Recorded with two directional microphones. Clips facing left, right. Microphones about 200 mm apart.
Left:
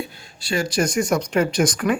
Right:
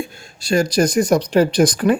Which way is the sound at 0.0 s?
40° right (ahead or behind).